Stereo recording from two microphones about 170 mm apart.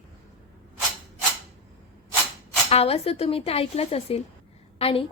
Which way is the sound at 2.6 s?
35° left (ahead or behind).